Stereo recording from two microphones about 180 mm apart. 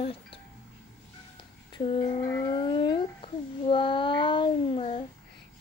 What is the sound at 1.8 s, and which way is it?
A child's voice, 30° left (ahead or behind).